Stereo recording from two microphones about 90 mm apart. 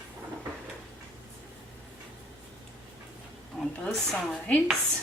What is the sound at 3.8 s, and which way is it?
Speech, 5° left (ahead or behind).